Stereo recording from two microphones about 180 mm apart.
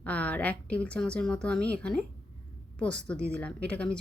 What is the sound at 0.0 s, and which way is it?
A woman's voice, 5° left (ahead or behind).